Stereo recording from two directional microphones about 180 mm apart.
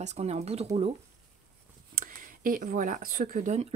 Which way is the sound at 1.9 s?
50° right (ahead or behind).